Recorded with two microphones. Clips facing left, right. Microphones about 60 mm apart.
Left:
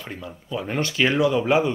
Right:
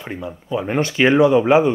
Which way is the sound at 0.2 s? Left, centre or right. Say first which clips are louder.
Right 7 dB; right.